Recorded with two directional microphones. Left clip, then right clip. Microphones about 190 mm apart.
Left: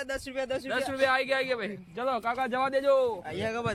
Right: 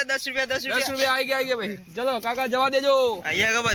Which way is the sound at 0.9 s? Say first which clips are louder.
Even; 25° right (ahead or behind).